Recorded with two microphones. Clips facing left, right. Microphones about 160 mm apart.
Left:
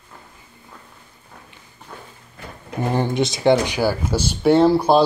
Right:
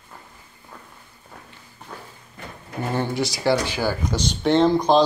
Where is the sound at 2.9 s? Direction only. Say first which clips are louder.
Left 3 dB; 20° left (ahead or behind).